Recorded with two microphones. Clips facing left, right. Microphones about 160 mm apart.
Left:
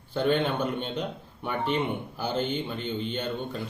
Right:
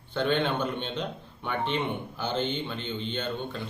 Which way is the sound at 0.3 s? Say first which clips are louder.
Left 1 dB; 10° left (ahead or behind).